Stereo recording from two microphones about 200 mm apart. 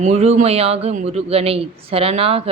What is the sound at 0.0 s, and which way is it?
Speech, 35° right (ahead or behind).